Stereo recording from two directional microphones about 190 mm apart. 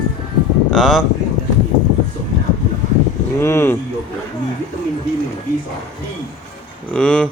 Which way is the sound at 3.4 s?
10° left (ahead or behind).